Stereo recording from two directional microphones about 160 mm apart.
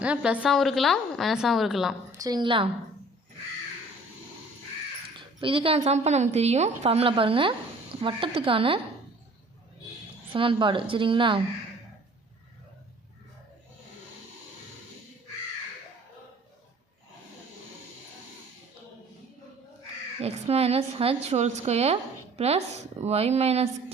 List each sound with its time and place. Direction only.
0.0 s a woman's voice: 5° right (ahead or behind)
2.1 s a woman's voice: 25° right (ahead or behind)
5.4 s a woman's voice: 35° right (ahead or behind)
10.3 s a woman's voice: 35° right (ahead or behind)
20.2 s a woman's voice: 40° right (ahead or behind)